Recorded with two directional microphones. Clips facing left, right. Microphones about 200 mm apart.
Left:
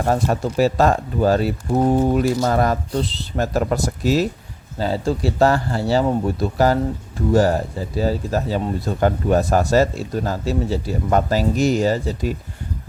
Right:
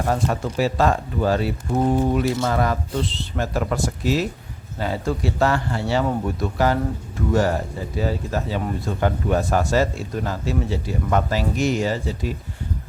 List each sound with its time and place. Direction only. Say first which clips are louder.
0.1 s a man's voice: left 4 dB; 40° left (ahead or behind)